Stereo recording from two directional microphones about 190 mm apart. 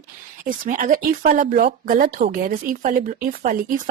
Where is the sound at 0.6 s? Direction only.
45° right (ahead or behind).